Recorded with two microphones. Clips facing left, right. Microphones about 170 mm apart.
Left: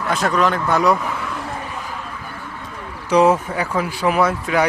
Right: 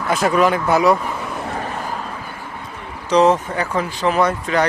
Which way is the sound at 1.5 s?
45° right (ahead or behind).